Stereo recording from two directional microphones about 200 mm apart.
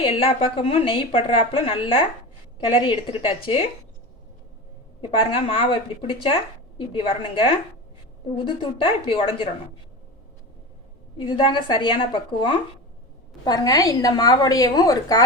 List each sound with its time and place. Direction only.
0.0 s a woman's voice: 30° left (ahead or behind)
4.9 s a woman's voice: 25° left (ahead or behind)
11.2 s a woman's voice: 25° left (ahead or behind)